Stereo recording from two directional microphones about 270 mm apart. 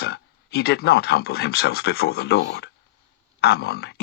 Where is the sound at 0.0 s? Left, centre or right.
Left.